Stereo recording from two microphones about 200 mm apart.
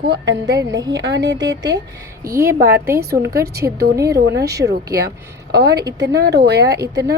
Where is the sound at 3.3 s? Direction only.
50° right (ahead or behind).